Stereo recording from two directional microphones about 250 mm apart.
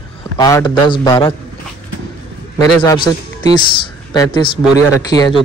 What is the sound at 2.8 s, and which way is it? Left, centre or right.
Speech, centre.